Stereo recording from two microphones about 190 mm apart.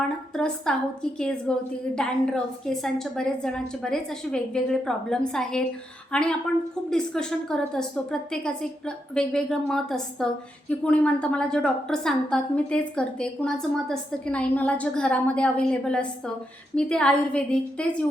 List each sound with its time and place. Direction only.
0.0 s a woman's voice: 5° left (ahead or behind)